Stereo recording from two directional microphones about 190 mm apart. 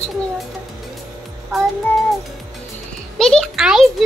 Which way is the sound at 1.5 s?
Centre (ahead or behind).